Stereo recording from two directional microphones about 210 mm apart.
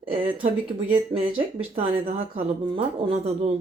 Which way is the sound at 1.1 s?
25° right (ahead or behind).